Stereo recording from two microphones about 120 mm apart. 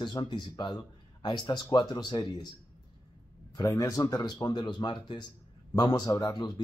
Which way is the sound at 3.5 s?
30° left (ahead or behind).